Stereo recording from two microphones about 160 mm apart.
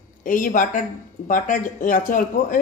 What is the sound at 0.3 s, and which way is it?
Speech, 55° left (ahead or behind).